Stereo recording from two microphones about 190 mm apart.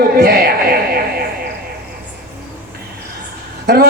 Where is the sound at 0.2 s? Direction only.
50° right (ahead or behind).